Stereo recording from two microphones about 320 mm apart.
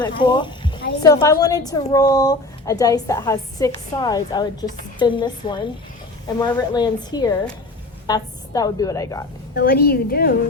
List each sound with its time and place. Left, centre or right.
0.0 s a woman's voice: centre
9.6 s a woman's voice: left